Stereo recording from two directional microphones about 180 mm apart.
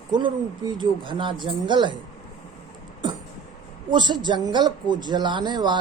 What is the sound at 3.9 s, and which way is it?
Speech, 25° right (ahead or behind).